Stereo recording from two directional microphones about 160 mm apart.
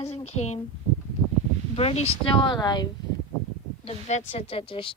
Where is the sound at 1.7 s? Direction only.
40° left (ahead or behind).